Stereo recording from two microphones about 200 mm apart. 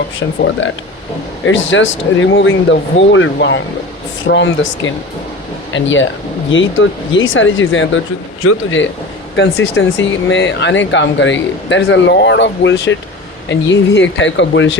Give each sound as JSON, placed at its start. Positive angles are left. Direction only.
{"t": 0.2, "sound": "speech", "side_deg": 70}
{"t": 3.3, "sound": "speech", "side_deg": 60}